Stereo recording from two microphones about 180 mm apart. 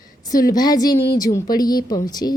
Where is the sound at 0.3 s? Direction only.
20° left (ahead or behind).